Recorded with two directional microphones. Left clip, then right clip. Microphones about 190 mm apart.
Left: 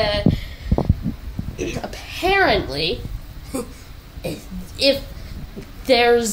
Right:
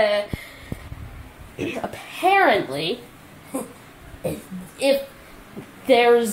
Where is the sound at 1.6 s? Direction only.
Centre (ahead or behind).